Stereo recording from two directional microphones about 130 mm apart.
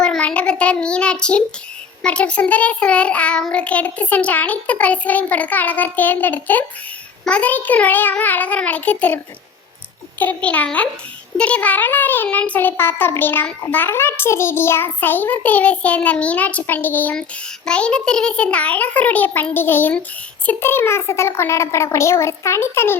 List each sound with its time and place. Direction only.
0.0 s a child's voice: 5° left (ahead or behind)